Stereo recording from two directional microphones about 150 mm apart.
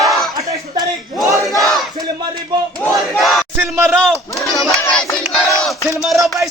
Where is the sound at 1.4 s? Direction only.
Centre (ahead or behind).